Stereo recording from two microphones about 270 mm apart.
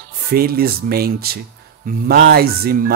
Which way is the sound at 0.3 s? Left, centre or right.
Right.